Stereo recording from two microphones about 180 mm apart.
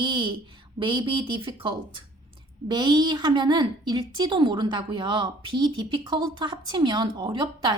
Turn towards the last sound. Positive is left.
turn(degrees=-25)  # may be behind; listen again after turning